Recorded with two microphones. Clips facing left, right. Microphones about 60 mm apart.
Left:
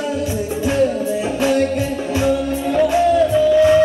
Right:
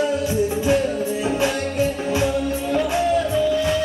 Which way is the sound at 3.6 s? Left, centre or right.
Left.